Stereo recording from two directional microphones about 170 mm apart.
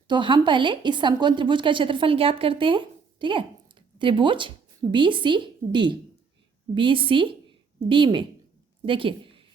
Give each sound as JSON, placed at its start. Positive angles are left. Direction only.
{"t": 0.1, "sound": "a woman's voice", "side_deg": -25}